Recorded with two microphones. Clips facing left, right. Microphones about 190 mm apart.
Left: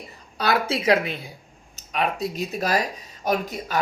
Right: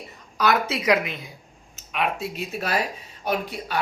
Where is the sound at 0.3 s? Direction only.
30° left (ahead or behind).